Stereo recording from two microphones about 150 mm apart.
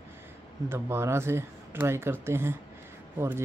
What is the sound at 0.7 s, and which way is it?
Speech, 15° right (ahead or behind).